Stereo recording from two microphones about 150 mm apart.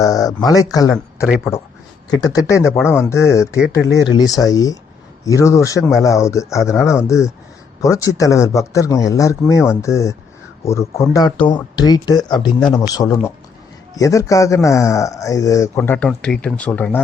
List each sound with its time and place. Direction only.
0.0 s speech: 25° left (ahead or behind)
15.8 s speech: 10° left (ahead or behind)